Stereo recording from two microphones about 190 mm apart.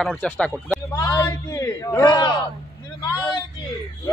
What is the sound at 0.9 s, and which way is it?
A man's voice, 20° left (ahead or behind).